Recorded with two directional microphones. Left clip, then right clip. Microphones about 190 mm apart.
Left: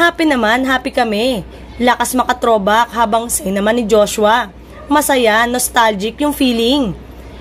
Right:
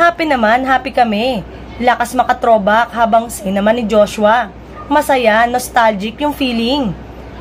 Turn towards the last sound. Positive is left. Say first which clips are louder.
# left 2 dB
turn(degrees=45)  # may be behind; listen again after turning